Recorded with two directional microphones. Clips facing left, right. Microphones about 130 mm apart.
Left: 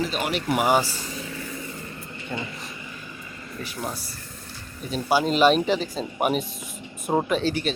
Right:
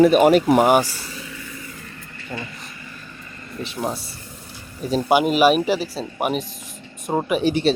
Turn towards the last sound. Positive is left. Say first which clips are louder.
# right 4 dB
turn(degrees=-15)  # may be behind; listen again after turning